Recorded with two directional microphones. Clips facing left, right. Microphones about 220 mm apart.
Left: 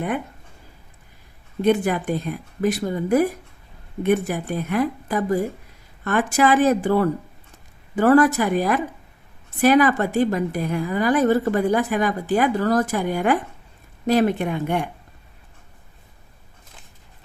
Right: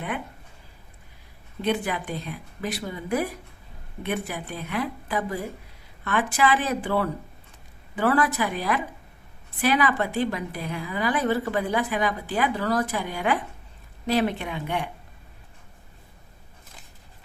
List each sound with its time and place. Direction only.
1.6 s a woman's voice: 45° left (ahead or behind)